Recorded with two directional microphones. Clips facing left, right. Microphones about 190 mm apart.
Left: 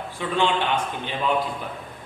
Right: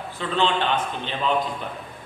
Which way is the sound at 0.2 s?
15° left (ahead or behind).